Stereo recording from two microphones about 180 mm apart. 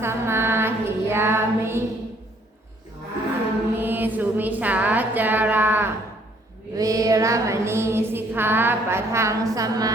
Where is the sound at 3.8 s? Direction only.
10° right (ahead or behind).